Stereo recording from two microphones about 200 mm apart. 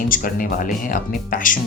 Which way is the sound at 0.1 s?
45° left (ahead or behind).